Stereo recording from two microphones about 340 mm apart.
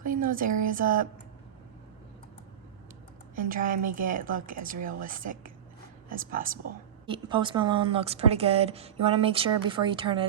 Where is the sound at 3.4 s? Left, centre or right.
Right.